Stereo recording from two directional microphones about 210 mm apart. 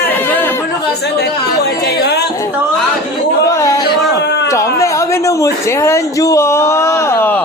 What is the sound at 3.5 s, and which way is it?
A man's voice, 15° left (ahead or behind).